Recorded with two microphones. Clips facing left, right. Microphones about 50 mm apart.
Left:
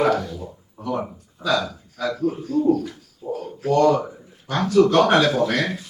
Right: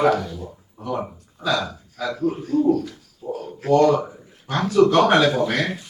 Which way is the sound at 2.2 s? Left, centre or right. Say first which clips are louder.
Right 2 dB; right.